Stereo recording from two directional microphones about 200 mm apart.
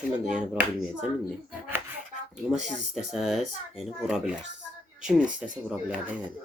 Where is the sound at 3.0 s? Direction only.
Centre (ahead or behind).